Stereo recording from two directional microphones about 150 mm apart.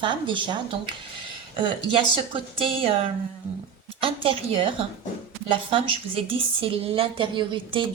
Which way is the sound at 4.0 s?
40° right (ahead or behind).